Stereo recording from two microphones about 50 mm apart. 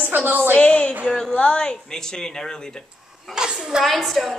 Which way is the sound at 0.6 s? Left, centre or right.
Left.